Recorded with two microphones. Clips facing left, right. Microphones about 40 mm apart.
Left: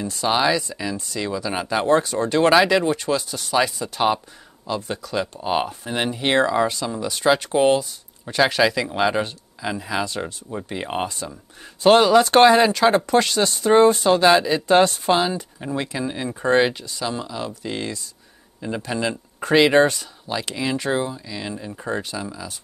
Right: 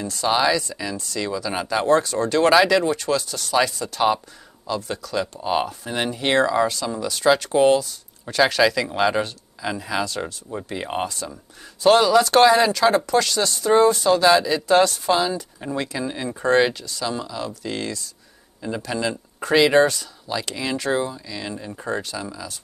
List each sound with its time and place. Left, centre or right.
0.0 s speech: centre